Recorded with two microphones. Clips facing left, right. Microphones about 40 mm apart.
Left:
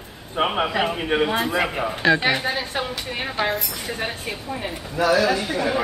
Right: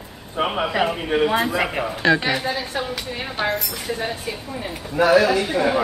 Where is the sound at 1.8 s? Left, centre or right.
Centre.